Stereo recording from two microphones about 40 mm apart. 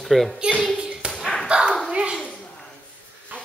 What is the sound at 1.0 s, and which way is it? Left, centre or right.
Tap, right.